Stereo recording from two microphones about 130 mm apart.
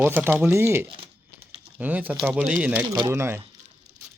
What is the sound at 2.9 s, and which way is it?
Speech, 25° right (ahead or behind).